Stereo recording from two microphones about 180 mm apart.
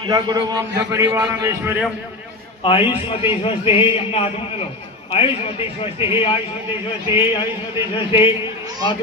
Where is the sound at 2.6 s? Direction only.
30° left (ahead or behind).